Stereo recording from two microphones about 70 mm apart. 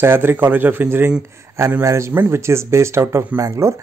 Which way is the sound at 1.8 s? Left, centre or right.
Right.